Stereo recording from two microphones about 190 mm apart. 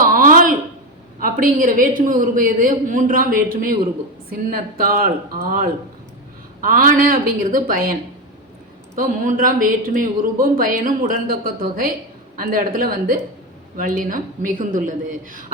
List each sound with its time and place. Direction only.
0.0 s a sound: 45° right (ahead or behind)
1.2 s a woman's voice: 45° right (ahead or behind)
9.0 s speech: 45° right (ahead or behind)